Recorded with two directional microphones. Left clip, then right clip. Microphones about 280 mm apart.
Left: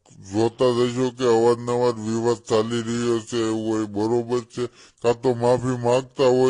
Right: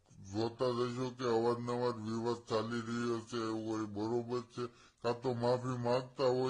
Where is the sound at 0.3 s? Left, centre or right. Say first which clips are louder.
Left 15 dB; left.